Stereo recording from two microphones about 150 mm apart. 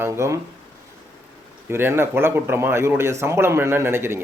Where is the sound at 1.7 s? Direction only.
15° right (ahead or behind).